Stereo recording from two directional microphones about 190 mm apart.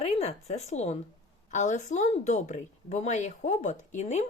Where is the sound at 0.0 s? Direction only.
35° left (ahead or behind).